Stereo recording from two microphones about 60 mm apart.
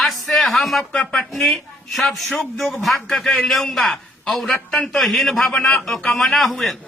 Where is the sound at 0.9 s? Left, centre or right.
Centre.